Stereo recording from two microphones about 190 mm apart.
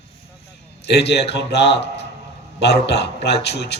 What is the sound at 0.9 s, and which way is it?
A man's voice, 60° left (ahead or behind).